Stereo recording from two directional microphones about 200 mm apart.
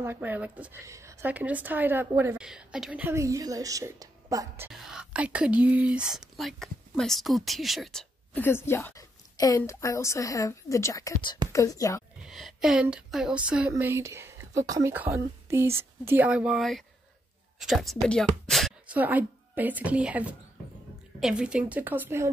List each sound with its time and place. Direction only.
0.0 s a woman's voice: 10° right (ahead or behind)
4.7 s speech: centre (ahead or behind); by 12.0 s 15° left (ahead or behind)
12.2 s a woman's voice: centre (ahead or behind)